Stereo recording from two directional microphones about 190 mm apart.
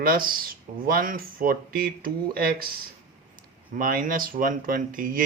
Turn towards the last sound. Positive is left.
turn(degrees=-45)  # may be behind; listen again after turning